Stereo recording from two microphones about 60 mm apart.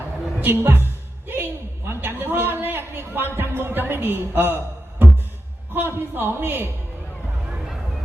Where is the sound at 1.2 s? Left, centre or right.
Right.